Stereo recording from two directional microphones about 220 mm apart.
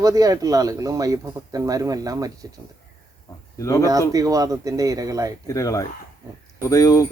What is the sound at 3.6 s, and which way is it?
Speech, 15° left (ahead or behind).